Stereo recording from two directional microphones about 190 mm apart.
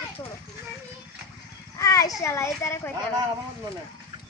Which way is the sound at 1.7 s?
15° left (ahead or behind).